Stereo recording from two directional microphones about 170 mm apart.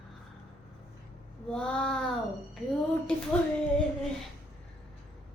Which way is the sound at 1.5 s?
5° left (ahead or behind).